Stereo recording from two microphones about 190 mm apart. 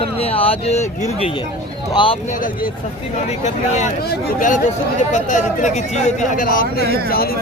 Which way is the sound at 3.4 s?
40° left (ahead or behind).